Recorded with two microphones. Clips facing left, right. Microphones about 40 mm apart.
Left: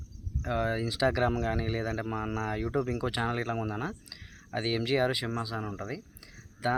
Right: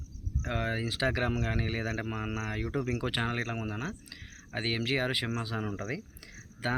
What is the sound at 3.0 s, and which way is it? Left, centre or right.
Speech, right.